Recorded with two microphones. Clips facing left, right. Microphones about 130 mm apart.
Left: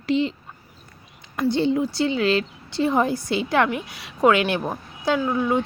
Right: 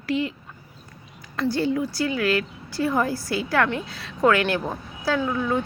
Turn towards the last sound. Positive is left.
turn(degrees=20)  # may be behind; listen again after turning